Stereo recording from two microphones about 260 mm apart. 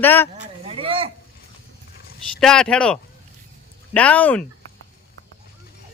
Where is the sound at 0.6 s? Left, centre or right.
Right.